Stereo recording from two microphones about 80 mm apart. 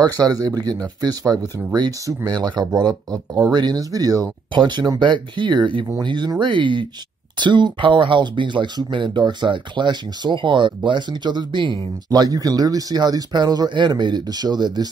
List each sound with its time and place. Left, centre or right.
0.0 s speech: right
4.6 s speech: right
6.0 s speech: right
6.4 s speech: right
7.3 s speech: right
12.1 s speech: right